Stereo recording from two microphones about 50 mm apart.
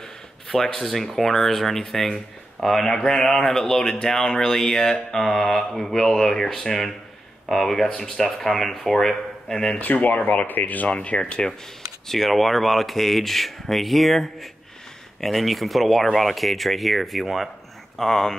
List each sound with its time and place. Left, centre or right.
0.5 s speech: centre
9.8 s speech: left; by 11.5 s centre
12.1 s speech: centre